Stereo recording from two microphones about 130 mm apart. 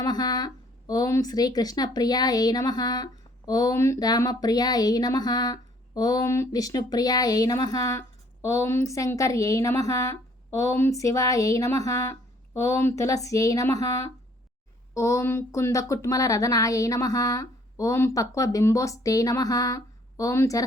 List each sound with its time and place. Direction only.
0.0 s speech: 30° left (ahead or behind)